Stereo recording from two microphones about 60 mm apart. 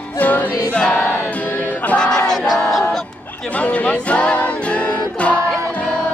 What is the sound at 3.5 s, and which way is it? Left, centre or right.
Music, left.